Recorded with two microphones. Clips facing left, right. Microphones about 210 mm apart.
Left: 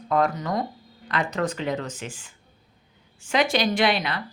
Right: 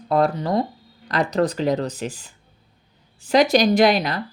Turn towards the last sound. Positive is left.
turn(degrees=-40)  # may be behind; listen again after turning